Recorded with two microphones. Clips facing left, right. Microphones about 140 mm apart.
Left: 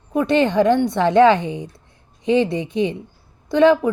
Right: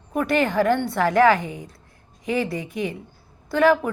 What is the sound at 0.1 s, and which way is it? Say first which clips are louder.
A woman's voice: left 4 dB; 20° left (ahead or behind).